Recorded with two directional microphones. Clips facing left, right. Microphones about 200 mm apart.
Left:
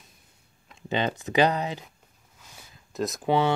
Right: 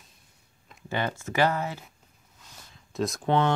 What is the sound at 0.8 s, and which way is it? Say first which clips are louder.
Speech: left 3 dB; 20° left (ahead or behind).